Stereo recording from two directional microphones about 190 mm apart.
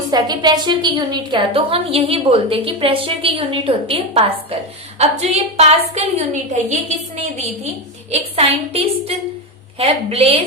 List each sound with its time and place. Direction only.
0.1 s a woman's voice: 20° right (ahead or behind); by 6.9 s 40° right (ahead or behind)
8.4 s a woman's voice: 30° right (ahead or behind)